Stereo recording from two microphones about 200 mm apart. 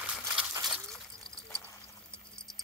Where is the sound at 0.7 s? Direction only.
Centre (ahead or behind).